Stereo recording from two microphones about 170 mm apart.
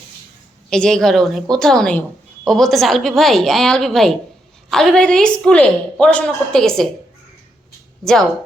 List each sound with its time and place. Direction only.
0.7 s a woman's voice: 5° left (ahead or behind)
8.0 s a woman's voice: 5° left (ahead or behind)